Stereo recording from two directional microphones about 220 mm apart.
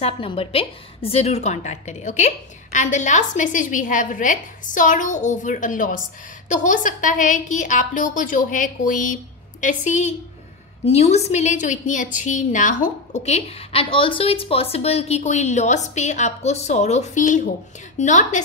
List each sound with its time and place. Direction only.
0.0 s a woman's voice: 25° left (ahead or behind)